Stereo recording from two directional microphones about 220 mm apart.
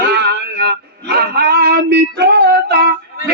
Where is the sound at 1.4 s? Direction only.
45° right (ahead or behind).